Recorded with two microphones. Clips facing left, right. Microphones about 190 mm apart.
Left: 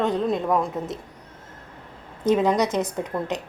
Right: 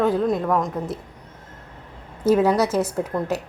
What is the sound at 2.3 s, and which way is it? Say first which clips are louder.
A woman's voice: right 2 dB; 5° right (ahead or behind).